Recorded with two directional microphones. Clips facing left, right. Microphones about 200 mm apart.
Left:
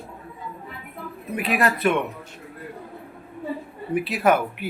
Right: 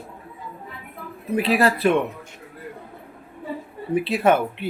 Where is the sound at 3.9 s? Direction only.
30° right (ahead or behind).